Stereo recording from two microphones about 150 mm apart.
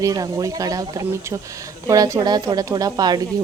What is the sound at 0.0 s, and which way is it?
Speech, 25° right (ahead or behind).